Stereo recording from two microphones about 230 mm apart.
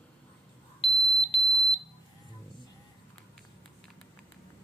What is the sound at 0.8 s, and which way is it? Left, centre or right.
Smoke detector, left.